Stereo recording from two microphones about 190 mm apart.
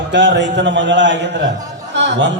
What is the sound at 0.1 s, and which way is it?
A man's voice, 70° right (ahead or behind).